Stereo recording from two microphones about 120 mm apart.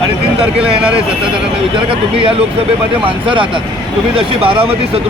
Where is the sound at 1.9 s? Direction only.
50° right (ahead or behind).